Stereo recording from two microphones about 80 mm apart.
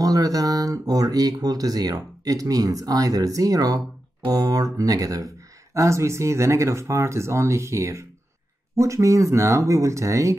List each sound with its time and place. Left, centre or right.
0.0 s speech: right